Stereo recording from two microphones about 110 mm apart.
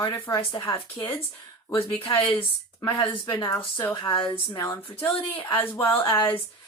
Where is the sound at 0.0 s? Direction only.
30° left (ahead or behind).